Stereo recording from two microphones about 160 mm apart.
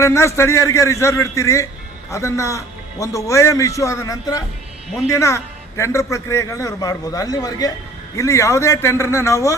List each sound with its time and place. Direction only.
0.0 s a man's voice: 20° left (ahead or behind)